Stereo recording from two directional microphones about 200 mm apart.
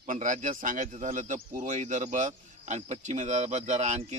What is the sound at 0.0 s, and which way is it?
A man's voice, 40° right (ahead or behind).